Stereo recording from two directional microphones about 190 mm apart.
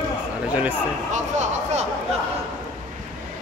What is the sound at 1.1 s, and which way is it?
Speech, 35° right (ahead or behind).